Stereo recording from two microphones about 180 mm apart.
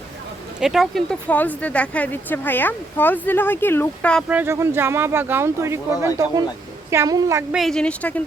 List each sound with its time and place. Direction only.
0.6 s speech: centre (ahead or behind)
4.3 s speech: 10° right (ahead or behind)
7.5 s speech: centre (ahead or behind)